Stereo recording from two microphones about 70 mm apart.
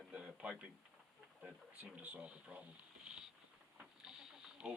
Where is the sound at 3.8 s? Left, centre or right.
Centre.